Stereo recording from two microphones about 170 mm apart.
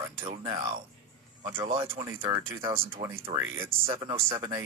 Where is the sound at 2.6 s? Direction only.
30° right (ahead or behind).